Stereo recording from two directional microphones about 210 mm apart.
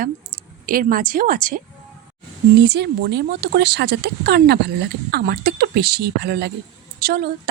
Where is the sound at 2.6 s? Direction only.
50° right (ahead or behind).